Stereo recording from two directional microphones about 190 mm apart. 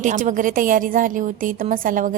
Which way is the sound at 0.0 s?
40° right (ahead or behind).